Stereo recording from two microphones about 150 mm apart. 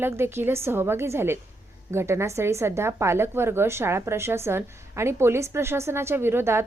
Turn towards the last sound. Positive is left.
turn(degrees=-15)  # may be behind; listen again after turning